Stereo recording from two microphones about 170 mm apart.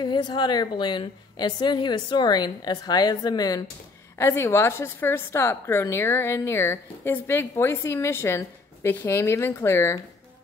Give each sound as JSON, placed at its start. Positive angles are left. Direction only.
{"t": 0.0, "sound": "a woman's voice", "side_deg": 25}